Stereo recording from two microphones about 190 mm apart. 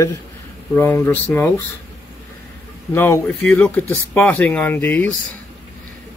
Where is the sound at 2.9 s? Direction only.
10° left (ahead or behind).